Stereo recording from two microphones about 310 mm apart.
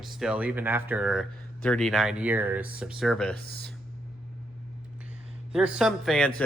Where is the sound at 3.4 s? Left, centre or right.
Right.